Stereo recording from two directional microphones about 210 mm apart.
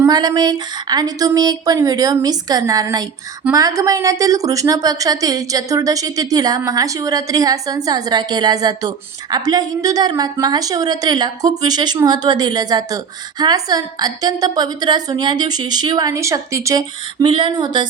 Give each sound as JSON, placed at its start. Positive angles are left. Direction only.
{"t": 0.0, "sound": "a woman's voice", "side_deg": -20}